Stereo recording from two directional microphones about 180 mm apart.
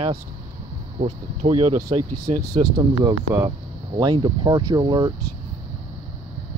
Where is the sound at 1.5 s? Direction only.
35° right (ahead or behind).